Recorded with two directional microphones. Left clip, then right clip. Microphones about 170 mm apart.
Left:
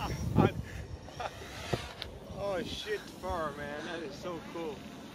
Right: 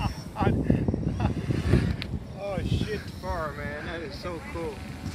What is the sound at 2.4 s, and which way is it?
Vehicle, 45° left (ahead or behind).